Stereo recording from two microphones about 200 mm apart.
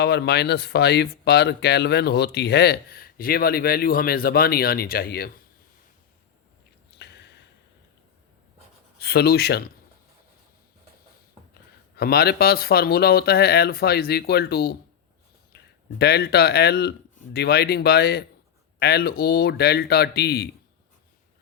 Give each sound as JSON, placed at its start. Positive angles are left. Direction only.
{"t": 0.0, "sound": "speech", "side_deg": 55}
{"t": 7.0, "sound": "a sound", "side_deg": 60}
{"t": 9.0, "sound": "speech", "side_deg": 50}
{"t": 11.9, "sound": "speech", "side_deg": 50}